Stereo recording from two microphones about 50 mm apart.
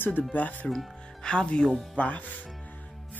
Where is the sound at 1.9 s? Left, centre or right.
Left.